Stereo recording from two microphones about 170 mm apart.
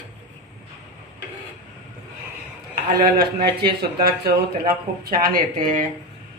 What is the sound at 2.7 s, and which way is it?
Speech, 60° right (ahead or behind).